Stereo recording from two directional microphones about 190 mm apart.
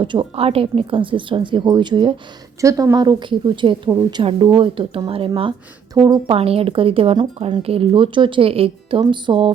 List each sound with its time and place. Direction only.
0.0 s speech: 25° right (ahead or behind)